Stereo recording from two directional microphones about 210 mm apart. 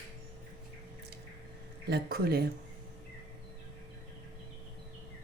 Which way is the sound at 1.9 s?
50° right (ahead or behind).